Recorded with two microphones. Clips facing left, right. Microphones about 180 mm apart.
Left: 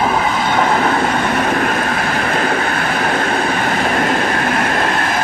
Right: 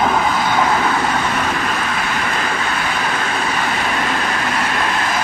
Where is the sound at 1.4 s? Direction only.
50° left (ahead or behind).